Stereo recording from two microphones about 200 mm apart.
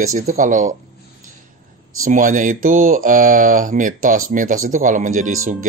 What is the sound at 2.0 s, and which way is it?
Speech, 40° right (ahead or behind).